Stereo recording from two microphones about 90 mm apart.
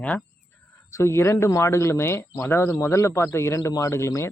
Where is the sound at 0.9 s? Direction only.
35° left (ahead or behind).